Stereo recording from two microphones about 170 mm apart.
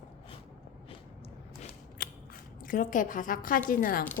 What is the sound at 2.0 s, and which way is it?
Scissors, 65° left (ahead or behind).